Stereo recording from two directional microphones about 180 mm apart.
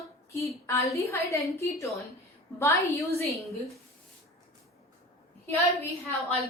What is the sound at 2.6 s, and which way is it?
Female singing, 15° left (ahead or behind).